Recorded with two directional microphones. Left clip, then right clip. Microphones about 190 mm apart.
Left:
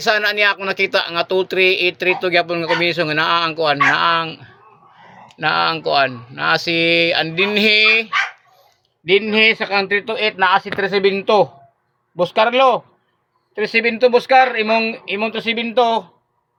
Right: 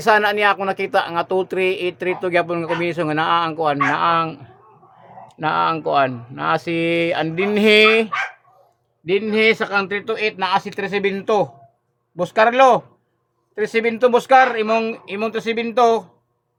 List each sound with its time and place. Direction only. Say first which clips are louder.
0.0 s speech: even; 20° right (ahead or behind)
5.4 s speech: left 2 dB; 15° right (ahead or behind)
9.0 s speech: left 3 dB; 10° left (ahead or behind)